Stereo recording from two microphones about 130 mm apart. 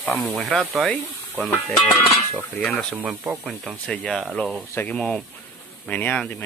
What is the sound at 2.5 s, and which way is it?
Speech, 15° left (ahead or behind).